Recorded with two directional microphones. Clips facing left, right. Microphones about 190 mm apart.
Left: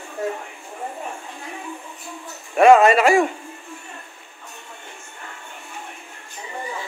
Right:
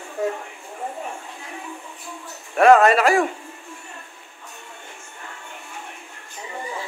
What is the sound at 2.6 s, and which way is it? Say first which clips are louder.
Speech: left 1 dB; centre (ahead or behind).